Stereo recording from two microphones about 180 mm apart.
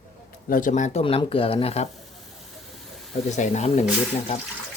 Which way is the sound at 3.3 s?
40° left (ahead or behind).